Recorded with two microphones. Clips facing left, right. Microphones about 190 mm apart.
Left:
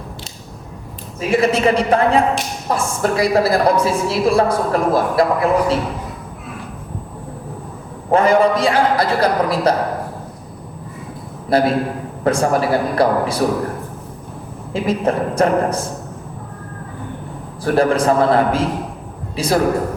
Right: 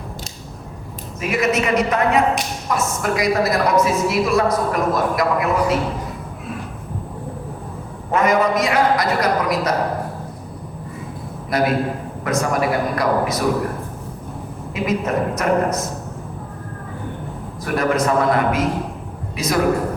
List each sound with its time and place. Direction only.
1.3 s a woman's voice: 30° left (ahead or behind)
8.1 s a woman's voice: 30° left (ahead or behind)
11.4 s a man's voice: 30° left (ahead or behind)
14.7 s a woman's voice: 30° left (ahead or behind)
17.6 s a woman's voice: 30° left (ahead or behind)